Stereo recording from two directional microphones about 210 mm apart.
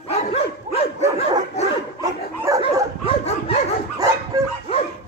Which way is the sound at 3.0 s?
30° left (ahead or behind).